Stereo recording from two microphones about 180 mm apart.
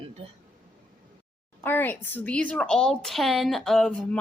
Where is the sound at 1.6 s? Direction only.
10° left (ahead or behind).